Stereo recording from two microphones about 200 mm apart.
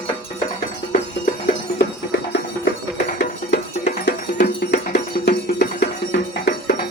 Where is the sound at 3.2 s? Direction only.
40° left (ahead or behind).